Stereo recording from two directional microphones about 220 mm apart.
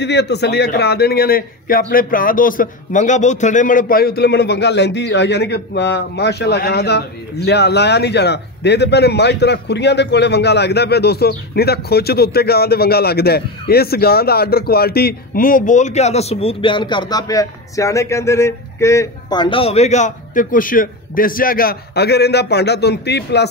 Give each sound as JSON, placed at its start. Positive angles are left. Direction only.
{"t": 0.0, "sound": "a man's voice", "side_deg": 50}